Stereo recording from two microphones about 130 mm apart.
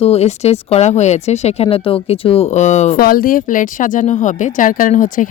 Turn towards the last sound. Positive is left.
turn(degrees=90)